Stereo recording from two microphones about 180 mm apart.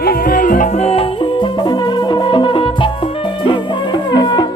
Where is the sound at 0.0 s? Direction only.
55° left (ahead or behind).